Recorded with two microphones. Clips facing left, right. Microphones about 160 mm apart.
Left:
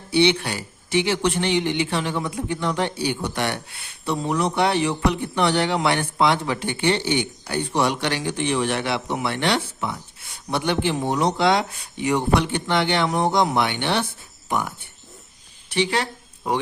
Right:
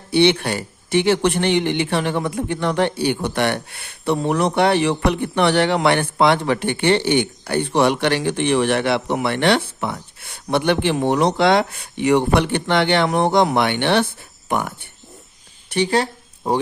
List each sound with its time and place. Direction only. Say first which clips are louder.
0.1 s a man's voice: right 3 dB; 55° right (ahead or behind)
15.7 s speech: right 4 dB; 40° right (ahead or behind)